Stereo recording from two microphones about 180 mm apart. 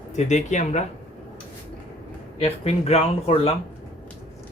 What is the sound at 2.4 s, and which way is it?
Speech, 35° left (ahead or behind).